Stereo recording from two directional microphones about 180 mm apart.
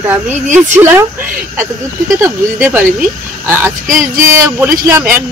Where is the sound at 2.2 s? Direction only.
10° right (ahead or behind).